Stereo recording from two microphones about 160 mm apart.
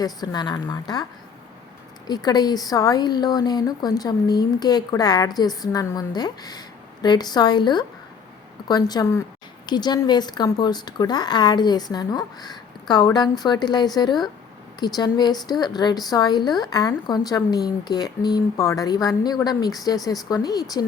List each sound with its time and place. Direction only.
0.0 s speech: 25° left (ahead or behind)
2.0 s speech: 25° left (ahead or behind)